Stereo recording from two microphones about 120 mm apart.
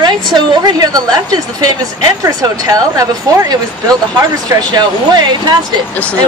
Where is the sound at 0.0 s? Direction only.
40° right (ahead or behind).